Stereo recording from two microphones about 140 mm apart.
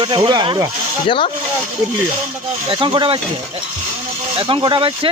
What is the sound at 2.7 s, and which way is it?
Speech, 35° right (ahead or behind).